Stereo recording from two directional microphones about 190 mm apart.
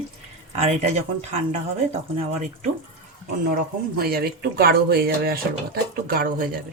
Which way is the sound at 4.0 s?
55° right (ahead or behind).